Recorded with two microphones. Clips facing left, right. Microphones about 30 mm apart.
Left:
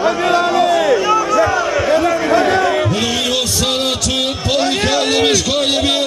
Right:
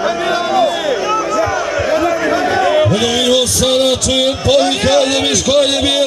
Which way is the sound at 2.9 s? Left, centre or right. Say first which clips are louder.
Right 4 dB; centre.